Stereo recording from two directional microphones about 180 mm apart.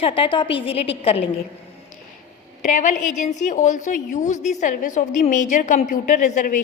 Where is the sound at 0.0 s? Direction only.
30° left (ahead or behind).